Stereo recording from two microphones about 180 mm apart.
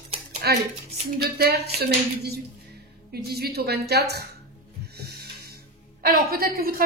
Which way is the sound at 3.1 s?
60° right (ahead or behind).